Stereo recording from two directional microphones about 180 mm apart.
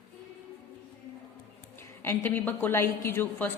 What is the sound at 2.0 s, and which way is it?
A woman's voice, 10° left (ahead or behind).